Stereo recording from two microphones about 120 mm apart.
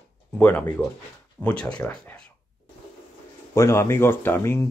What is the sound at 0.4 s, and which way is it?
Speech, 15° left (ahead or behind).